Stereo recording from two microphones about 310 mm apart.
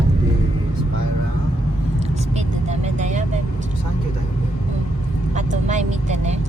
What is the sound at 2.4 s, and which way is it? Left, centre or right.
Vehicle, right.